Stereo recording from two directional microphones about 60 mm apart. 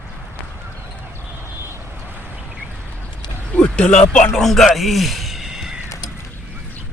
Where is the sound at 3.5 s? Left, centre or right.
Centre.